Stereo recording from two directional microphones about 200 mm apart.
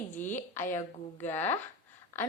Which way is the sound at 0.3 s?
10° left (ahead or behind).